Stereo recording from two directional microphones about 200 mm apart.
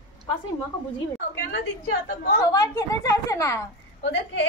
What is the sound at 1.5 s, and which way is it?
Speech, 55° left (ahead or behind).